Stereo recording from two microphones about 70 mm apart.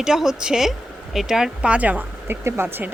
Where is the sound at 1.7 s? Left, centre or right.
Right.